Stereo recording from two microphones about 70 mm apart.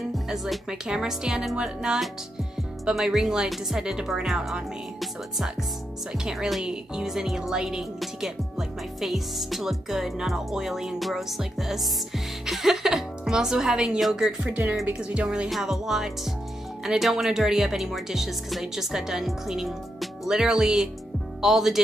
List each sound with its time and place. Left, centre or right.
0.3 s speech: centre
6.1 s a woman's voice: centre
14.4 s speech: centre